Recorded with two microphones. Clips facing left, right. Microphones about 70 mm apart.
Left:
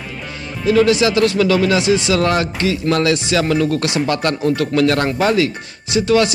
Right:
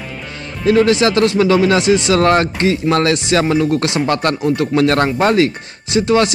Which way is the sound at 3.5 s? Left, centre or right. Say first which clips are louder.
Right 2 dB; right.